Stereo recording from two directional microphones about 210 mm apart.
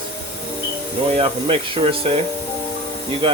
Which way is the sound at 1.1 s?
25° right (ahead or behind).